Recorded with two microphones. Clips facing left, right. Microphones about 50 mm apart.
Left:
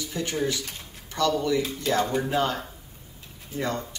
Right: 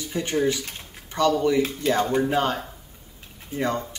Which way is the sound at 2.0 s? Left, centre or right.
Right.